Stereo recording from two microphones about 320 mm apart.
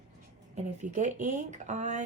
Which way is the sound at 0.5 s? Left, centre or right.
Right.